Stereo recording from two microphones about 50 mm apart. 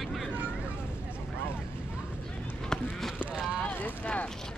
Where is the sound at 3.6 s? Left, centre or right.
Left.